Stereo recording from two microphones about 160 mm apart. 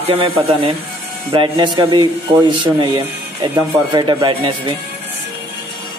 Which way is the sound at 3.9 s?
25° right (ahead or behind).